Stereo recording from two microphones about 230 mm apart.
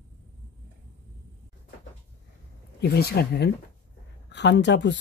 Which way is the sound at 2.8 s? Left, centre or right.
Left.